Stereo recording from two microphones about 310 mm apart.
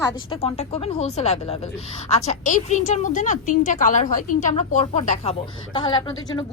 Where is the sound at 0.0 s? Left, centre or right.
Centre.